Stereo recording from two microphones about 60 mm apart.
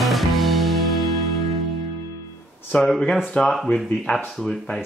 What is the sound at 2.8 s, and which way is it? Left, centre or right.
Speech, centre.